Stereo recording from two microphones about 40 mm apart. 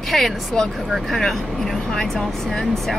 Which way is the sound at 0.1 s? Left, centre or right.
Centre.